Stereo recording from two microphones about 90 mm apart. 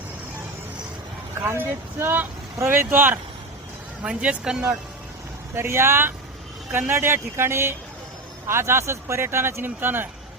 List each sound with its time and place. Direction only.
1.4 s speech: 25° right (ahead or behind)
4.0 s speech: 10° right (ahead or behind)
5.5 s speech: 30° right (ahead or behind)